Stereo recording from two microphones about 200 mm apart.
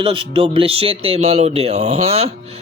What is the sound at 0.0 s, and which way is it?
Speech, 25° right (ahead or behind).